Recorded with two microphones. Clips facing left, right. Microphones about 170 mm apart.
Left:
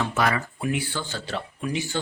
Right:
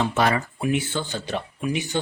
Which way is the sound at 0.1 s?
30° right (ahead or behind).